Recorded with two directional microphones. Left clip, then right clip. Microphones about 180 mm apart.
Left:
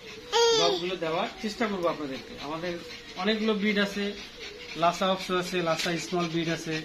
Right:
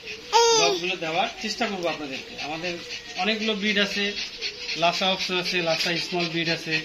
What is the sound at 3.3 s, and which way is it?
A man's voice, 10° left (ahead or behind).